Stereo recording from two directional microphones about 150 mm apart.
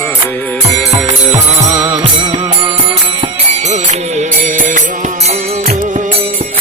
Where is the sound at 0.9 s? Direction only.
25° right (ahead or behind).